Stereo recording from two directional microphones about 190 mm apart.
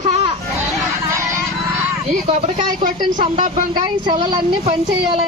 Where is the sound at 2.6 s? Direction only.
40° right (ahead or behind).